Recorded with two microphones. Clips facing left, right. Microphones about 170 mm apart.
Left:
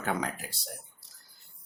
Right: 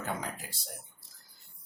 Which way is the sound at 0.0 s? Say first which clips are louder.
Left 5 dB; 70° left (ahead or behind).